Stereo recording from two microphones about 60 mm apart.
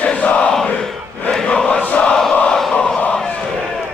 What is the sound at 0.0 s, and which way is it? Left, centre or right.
Crowd, left.